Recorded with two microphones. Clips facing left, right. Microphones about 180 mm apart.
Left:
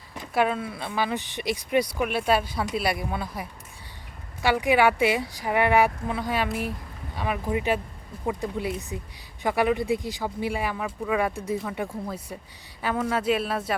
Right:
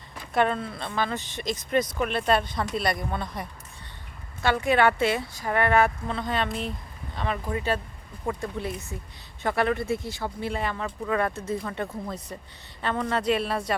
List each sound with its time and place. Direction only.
0.3 s speech: 5° left (ahead or behind)
4.4 s speech: 10° left (ahead or behind)